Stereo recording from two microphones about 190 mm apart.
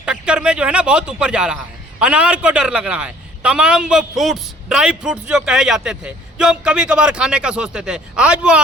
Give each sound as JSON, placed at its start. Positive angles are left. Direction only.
{"t": 0.0, "sound": "a man's voice", "side_deg": -5}